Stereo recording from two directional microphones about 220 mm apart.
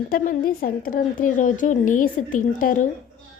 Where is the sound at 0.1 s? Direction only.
40° left (ahead or behind).